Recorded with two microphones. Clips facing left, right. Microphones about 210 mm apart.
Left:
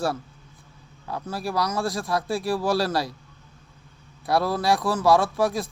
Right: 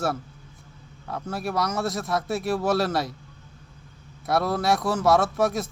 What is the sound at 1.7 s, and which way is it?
Speech, 25° right (ahead or behind).